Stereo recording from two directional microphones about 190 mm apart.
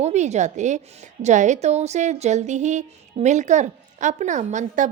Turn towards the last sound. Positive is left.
turn(degrees=-40)  # may be behind; listen again after turning